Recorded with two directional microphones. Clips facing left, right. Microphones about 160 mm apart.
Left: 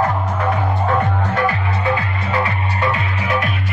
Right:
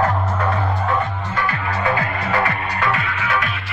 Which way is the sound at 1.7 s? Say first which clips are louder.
Even; 25° left (ahead or behind).